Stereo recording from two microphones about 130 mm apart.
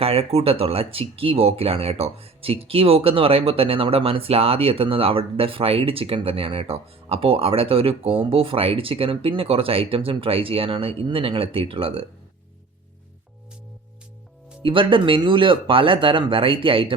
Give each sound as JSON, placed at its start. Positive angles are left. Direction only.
{"t": 0.0, "sound": "speech", "side_deg": -50}
{"t": 14.6, "sound": "speech", "side_deg": -40}